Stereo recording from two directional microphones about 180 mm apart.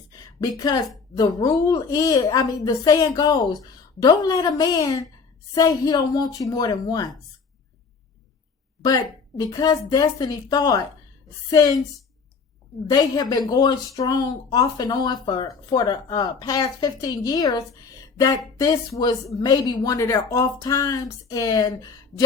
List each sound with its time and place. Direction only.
0.1 s a sound: 20° left (ahead or behind)
1.1 s speech: 20° left (ahead or behind)
9.4 s speech: 20° left (ahead or behind)
12.9 s speech: 20° left (ahead or behind)
18.6 s speech: 20° left (ahead or behind)